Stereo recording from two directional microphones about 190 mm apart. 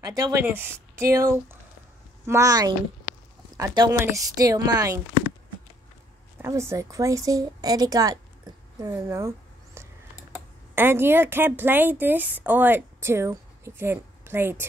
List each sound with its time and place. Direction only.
0.0 s a woman's voice: 20° right (ahead or behind)
6.3 s a woman's voice: 15° right (ahead or behind)
10.7 s a woman's voice: 10° right (ahead or behind)